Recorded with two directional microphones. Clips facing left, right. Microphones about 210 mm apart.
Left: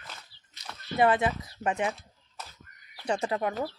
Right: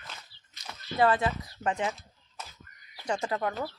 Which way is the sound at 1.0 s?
20° left (ahead or behind).